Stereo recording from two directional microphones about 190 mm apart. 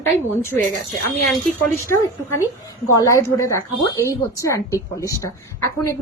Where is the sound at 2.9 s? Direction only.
15° left (ahead or behind).